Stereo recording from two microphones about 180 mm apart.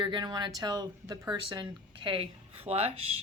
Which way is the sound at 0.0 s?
25° right (ahead or behind).